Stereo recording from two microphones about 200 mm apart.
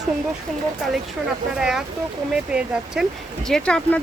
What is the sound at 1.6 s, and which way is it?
Speech, centre (ahead or behind).